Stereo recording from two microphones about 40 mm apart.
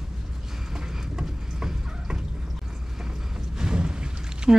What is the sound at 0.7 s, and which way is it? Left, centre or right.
Train, centre.